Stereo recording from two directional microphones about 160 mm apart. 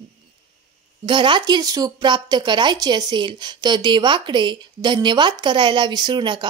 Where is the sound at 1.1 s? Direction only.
30° right (ahead or behind).